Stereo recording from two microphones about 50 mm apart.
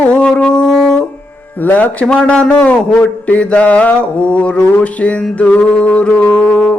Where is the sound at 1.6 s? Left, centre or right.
Left.